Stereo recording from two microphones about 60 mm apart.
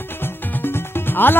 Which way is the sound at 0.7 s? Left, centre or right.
Left.